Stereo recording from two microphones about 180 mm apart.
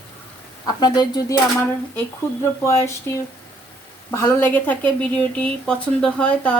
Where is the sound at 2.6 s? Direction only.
15° left (ahead or behind).